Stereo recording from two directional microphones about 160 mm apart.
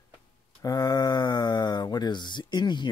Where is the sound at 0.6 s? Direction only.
20° left (ahead or behind).